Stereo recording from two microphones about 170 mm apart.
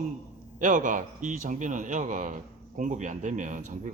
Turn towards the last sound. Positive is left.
turn(degrees=-50)  # may be behind; listen again after turning